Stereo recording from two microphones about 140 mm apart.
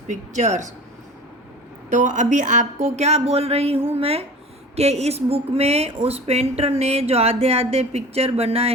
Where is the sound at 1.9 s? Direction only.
60° right (ahead or behind).